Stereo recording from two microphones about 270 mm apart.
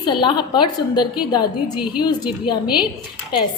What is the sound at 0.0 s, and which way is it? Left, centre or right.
A woman's voice, centre.